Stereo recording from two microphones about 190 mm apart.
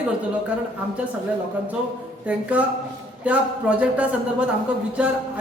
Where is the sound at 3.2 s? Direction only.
5° right (ahead or behind).